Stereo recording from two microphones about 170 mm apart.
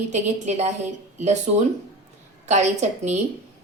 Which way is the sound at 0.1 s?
45° right (ahead or behind).